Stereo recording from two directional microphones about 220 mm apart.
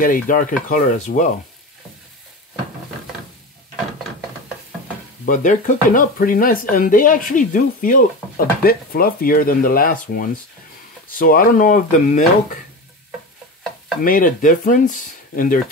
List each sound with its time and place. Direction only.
0.0 s speech: 40° left (ahead or behind)
5.2 s speech: 35° left (ahead or behind)
14.0 s speech: 40° left (ahead or behind)